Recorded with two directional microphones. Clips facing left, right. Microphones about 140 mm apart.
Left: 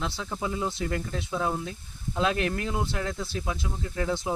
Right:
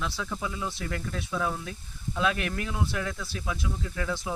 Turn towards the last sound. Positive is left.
turn(degrees=30)  # may be behind; listen again after turning